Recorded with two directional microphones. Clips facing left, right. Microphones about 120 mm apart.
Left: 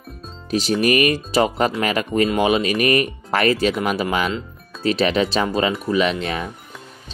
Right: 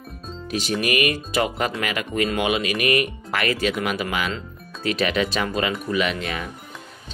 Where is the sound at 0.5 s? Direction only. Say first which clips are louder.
Left 6 dB; 35° left (ahead or behind).